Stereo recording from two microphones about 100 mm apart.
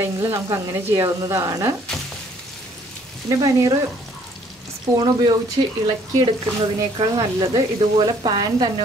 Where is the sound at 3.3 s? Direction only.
35° right (ahead or behind).